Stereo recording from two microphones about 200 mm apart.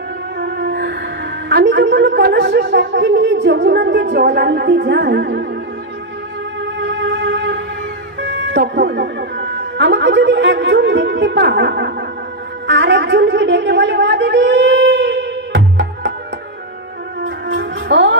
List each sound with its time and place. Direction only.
0.4 s music: 55° right (ahead or behind)
1.5 s speech: 60° right (ahead or behind)
6.8 s music: 65° right (ahead or behind)
8.2 s a man's voice: 65° right (ahead or behind)
12.6 s wind instrument: 60° right (ahead or behind)
17.2 s music: 60° right (ahead or behind)